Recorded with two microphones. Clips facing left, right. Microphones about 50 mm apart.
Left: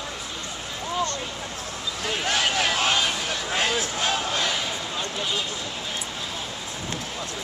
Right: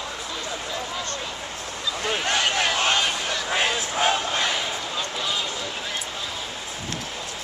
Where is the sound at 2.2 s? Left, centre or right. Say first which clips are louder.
Even; centre.